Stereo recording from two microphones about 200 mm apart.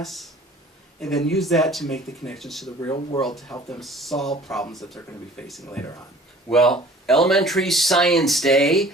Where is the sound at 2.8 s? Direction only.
20° left (ahead or behind).